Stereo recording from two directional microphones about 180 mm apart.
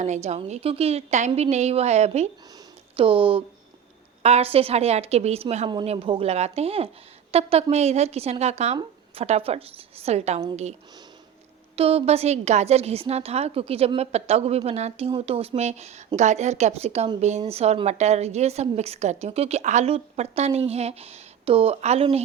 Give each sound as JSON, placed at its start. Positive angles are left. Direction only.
{"t": 0.0, "sound": "a woman's voice", "side_deg": -40}
{"t": 11.8, "sound": "a woman's voice", "side_deg": -35}